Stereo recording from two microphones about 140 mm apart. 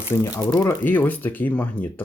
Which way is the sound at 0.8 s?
10° left (ahead or behind).